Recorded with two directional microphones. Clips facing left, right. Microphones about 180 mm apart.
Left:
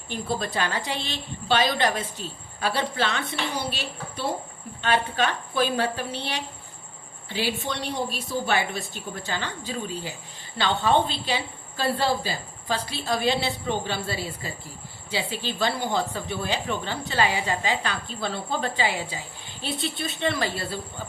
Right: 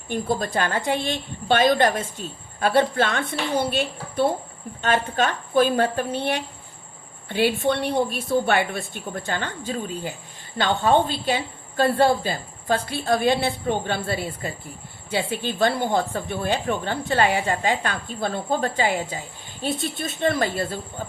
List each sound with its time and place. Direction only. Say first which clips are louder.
0.1 s a woman's voice: right 4 dB; 50° right (ahead or behind)